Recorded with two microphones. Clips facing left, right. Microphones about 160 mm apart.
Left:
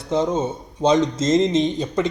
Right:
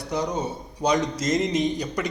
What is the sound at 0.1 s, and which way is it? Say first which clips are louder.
A man's voice: left 6 dB; 25° left (ahead or behind).